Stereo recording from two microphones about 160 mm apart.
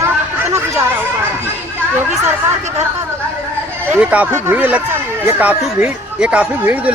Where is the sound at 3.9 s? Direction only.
10° right (ahead or behind).